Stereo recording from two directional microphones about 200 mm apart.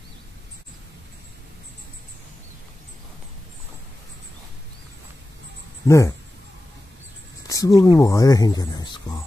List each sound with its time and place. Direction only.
5.9 s speech: 15° left (ahead or behind)
7.4 s speech: 15° left (ahead or behind)